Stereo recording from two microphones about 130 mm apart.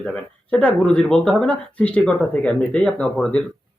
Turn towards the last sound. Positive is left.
turn(degrees=5)  # may be behind; listen again after turning